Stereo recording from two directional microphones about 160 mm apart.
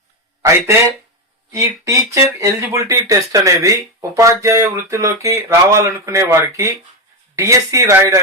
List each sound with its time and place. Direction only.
1.5 s speech: 20° right (ahead or behind)